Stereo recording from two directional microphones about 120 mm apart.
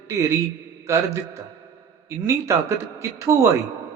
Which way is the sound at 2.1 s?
20° right (ahead or behind).